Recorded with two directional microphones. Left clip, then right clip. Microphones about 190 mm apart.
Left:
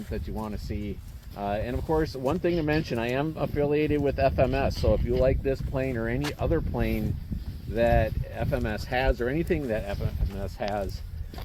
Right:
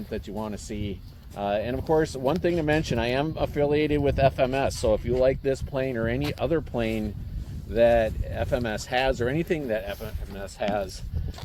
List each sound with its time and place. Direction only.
0.1 s speech: 35° left (ahead or behind)